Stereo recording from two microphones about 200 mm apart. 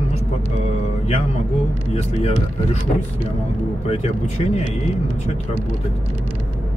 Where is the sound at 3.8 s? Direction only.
35° left (ahead or behind).